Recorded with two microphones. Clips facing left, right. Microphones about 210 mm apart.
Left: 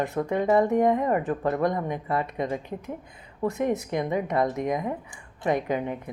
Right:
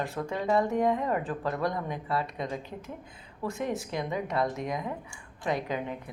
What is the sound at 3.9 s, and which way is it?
Speech, 50° left (ahead or behind).